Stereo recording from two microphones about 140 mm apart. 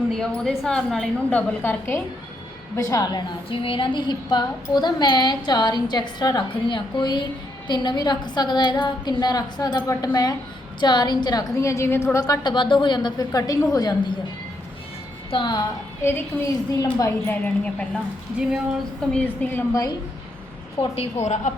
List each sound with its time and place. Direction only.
0.1 s a woman's voice: 5° left (ahead or behind)
2.7 s a woman's voice: 25° left (ahead or behind)
15.3 s a woman's voice: 35° left (ahead or behind)
16.8 s a woman's voice: 25° left (ahead or behind)
17.4 s a woman's voice: 10° left (ahead or behind)
18.4 s speech: 5° right (ahead or behind)
19.1 s a woman's voice: 10° left (ahead or behind)
20.9 s a woman's voice: 50° left (ahead or behind)